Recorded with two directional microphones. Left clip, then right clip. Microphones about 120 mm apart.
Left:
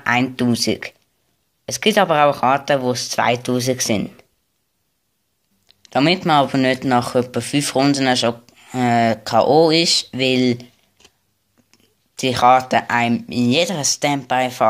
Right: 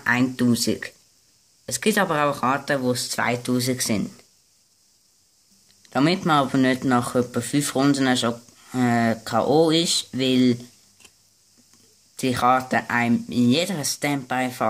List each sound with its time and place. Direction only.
0.0 s speech: 25° left (ahead or behind)
5.7 s speech: 15° left (ahead or behind)
11.7 s speech: 20° left (ahead or behind)